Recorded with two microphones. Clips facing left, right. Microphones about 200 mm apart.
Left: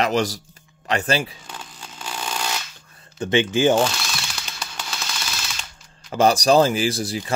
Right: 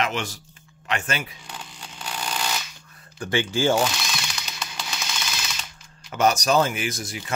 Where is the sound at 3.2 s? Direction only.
20° left (ahead or behind).